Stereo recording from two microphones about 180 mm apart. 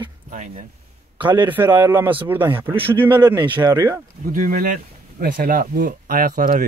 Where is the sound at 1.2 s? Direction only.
25° right (ahead or behind).